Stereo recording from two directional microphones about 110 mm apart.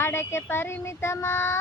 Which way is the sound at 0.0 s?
20° left (ahead or behind).